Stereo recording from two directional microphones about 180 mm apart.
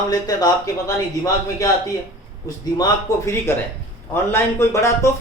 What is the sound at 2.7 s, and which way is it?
A man's voice, 20° left (ahead or behind).